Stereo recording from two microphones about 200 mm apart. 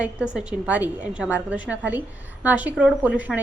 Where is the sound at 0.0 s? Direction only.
5° right (ahead or behind).